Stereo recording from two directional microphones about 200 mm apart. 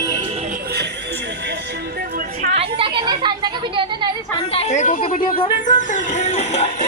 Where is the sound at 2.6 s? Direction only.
25° right (ahead or behind).